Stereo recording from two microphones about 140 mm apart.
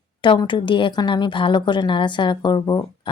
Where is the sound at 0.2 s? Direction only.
35° left (ahead or behind).